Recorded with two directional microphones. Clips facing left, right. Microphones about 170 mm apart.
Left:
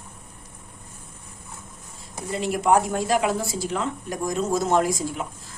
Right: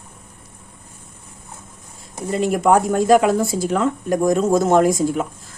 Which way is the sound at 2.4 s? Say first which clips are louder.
Right 4 dB; 50° right (ahead or behind).